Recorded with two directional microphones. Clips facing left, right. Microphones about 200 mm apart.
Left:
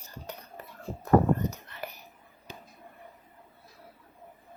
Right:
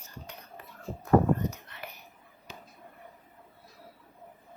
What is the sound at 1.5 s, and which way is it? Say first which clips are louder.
Whispering: left 4 dB; 40° left (ahead or behind).